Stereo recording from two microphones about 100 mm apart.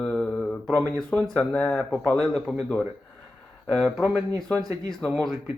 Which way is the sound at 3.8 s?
5° left (ahead or behind).